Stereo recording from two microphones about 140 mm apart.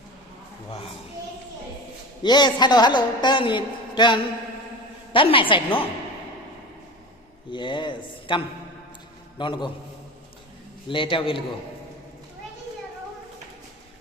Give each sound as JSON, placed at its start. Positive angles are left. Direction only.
{"t": 2.2, "sound": "a man's voice", "side_deg": 30}
{"t": 7.5, "sound": "a man's voice", "side_deg": 35}
{"t": 9.4, "sound": "a man's voice", "side_deg": 35}
{"t": 10.8, "sound": "a man's voice", "side_deg": 35}